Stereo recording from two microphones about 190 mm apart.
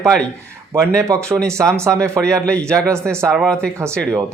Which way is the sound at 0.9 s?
15° right (ahead or behind).